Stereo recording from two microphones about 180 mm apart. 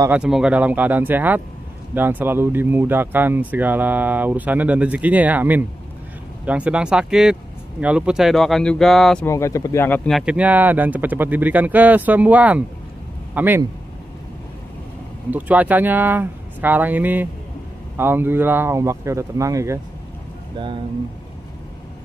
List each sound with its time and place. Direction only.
0.0 s speech: 5° right (ahead or behind)
9.2 s speech: 15° left (ahead or behind); by 13.7 s 10° right (ahead or behind)
15.3 s speech: 10° right (ahead or behind)